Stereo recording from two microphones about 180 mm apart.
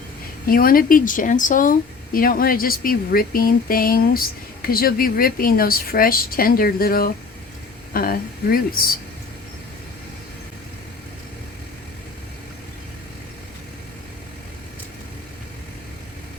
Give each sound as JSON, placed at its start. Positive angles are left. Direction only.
{"t": 0.4, "sound": "a woman's voice", "side_deg": 55}